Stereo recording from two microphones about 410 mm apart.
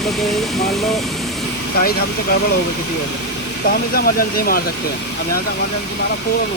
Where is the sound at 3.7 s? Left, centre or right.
Left.